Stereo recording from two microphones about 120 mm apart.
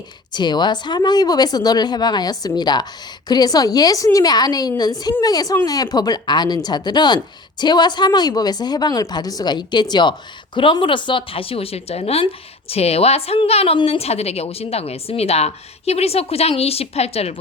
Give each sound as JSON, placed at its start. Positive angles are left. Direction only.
{"t": 0.3, "sound": "a woman's voice", "side_deg": 40}